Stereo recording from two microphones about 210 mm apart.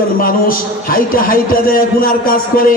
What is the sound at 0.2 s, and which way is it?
A man's voice, 45° left (ahead or behind).